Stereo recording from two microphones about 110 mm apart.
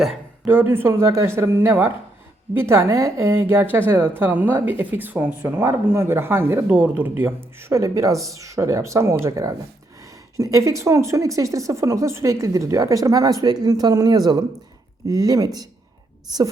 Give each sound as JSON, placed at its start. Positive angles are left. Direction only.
{"t": 0.4, "sound": "speech", "side_deg": -20}